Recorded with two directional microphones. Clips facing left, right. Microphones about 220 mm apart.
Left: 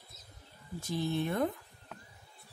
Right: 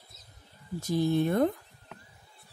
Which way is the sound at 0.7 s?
40° right (ahead or behind).